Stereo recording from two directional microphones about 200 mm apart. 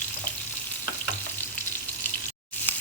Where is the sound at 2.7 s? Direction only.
10° left (ahead or behind).